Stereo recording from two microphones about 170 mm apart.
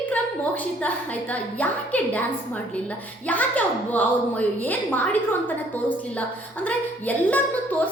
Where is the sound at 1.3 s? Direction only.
10° left (ahead or behind).